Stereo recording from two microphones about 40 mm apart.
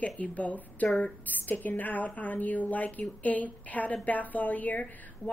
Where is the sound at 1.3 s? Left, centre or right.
Left.